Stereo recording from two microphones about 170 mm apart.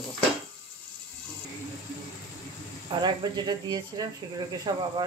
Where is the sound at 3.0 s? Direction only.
25° right (ahead or behind).